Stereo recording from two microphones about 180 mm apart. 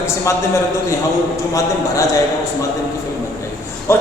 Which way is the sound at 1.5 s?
20° left (ahead or behind).